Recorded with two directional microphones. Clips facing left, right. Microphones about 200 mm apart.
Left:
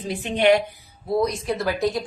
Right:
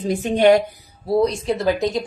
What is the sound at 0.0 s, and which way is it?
Speech, 45° right (ahead or behind).